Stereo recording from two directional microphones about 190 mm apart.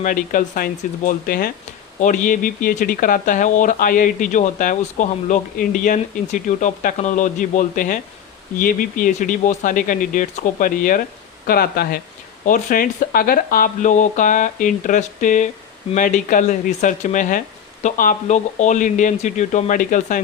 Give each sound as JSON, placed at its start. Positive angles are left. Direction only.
{"t": 0.0, "sound": "speech", "side_deg": 45}